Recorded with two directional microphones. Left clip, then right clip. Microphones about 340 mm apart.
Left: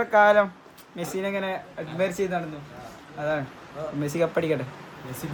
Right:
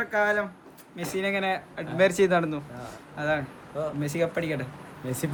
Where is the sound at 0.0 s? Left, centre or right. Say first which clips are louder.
Left 7 dB; centre.